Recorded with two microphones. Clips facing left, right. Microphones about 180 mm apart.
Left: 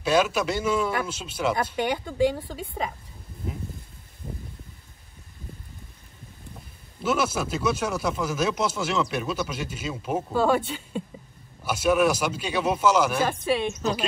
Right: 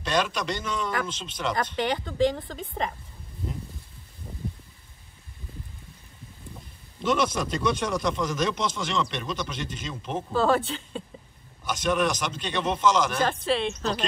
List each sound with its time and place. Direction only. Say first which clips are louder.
0.0 s speech: left 4 dB; 5° left (ahead or behind)
7.0 s speech: even; 5° left (ahead or behind)